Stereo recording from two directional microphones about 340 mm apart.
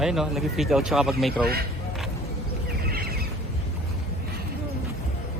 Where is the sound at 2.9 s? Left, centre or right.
Right.